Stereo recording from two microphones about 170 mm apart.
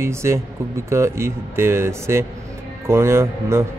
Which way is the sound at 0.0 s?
15° right (ahead or behind).